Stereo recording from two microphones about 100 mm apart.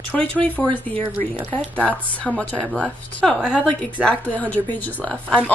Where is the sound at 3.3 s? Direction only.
10° right (ahead or behind).